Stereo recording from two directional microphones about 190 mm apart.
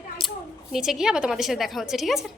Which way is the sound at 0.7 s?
Centre (ahead or behind).